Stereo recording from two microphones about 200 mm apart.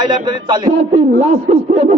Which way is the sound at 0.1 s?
20° right (ahead or behind).